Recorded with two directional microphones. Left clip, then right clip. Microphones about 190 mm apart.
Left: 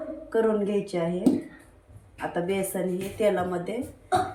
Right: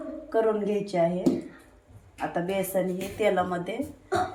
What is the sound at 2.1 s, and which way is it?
Speech, 35° right (ahead or behind).